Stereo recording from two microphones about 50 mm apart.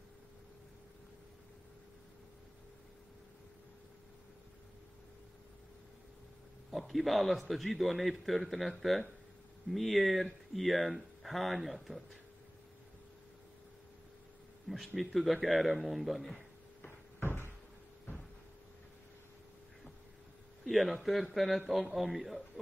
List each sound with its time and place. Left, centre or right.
6.7 s a man's voice: centre
15.0 s a man's voice: centre
16.8 s cupboard open or close: left
20.6 s a man's voice: centre